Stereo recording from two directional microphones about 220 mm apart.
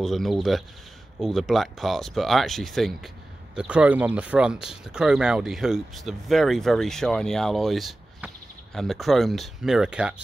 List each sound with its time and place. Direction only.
0.0 s speech: centre (ahead or behind)